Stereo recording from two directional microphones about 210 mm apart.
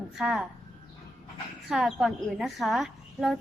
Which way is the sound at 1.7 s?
Centre (ahead or behind).